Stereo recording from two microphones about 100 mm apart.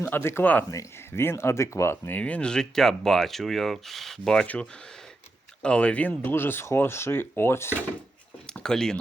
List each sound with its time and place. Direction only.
0.0 s speech: 25° left (ahead or behind)
8.4 s speech: 5° left (ahead or behind)